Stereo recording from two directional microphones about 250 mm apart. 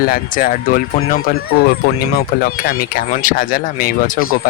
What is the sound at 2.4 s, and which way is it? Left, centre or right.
Speech, left.